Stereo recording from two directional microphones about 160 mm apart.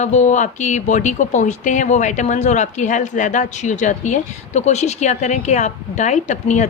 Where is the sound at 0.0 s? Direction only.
45° left (ahead or behind).